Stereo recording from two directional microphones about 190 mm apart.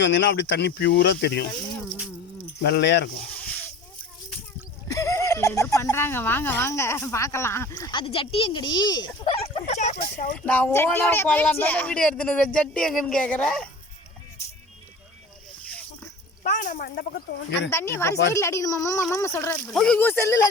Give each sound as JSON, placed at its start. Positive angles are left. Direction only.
{"t": 0.0, "sound": "speech", "side_deg": 70}
{"t": 2.6, "sound": "speech", "side_deg": 60}
{"t": 3.4, "sound": "a sound", "side_deg": 5}
{"t": 4.9, "sound": "speech", "side_deg": 15}
{"t": 9.3, "sound": "speech", "side_deg": 35}
{"t": 10.3, "sound": "speech", "side_deg": 5}
{"t": 16.4, "sound": "speech", "side_deg": 45}
{"t": 17.7, "sound": "speech", "side_deg": 15}